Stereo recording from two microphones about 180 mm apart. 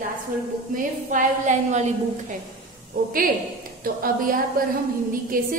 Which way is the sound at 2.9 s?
50° right (ahead or behind).